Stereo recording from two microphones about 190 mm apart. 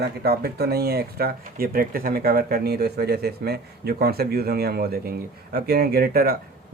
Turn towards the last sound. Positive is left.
turn(degrees=-55)  # may be behind; listen again after turning